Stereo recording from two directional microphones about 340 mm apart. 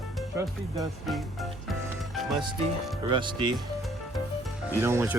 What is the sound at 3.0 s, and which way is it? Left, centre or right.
Speech, centre.